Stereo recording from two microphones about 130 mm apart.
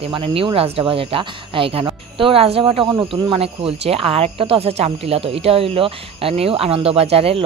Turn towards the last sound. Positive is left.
turn(degrees=-45)  # may be behind; listen again after turning